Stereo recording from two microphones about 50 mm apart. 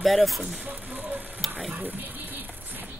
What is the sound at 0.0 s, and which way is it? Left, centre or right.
Speech, centre.